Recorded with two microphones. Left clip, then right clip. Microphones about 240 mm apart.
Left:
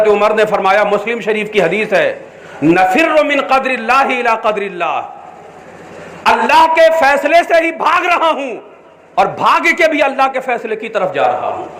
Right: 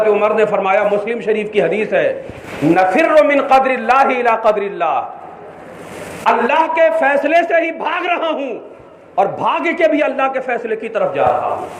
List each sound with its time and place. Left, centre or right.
0.0 s a man's voice: left
6.5 s a man's voice: left